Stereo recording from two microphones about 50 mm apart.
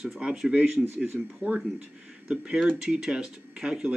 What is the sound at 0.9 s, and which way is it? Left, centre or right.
Speech, right.